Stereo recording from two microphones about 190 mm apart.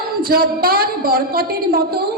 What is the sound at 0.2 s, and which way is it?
A woman's voice, 50° right (ahead or behind).